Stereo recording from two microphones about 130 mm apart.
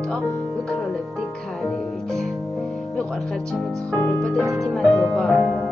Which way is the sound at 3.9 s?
Centre (ahead or behind).